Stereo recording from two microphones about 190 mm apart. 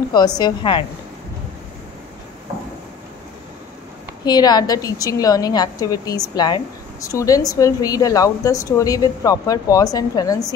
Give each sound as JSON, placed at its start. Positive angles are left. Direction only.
{"t": 0.1, "sound": "a woman's voice", "side_deg": 20}
{"t": 4.2, "sound": "a woman's voice", "side_deg": 20}